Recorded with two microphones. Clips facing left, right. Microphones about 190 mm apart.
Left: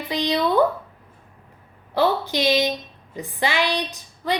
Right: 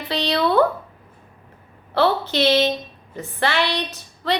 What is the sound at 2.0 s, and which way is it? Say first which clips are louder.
Female singing: right 2 dB; 15° left (ahead or behind).